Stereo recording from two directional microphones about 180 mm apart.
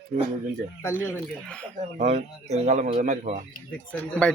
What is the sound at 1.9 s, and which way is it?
Speech, 40° right (ahead or behind).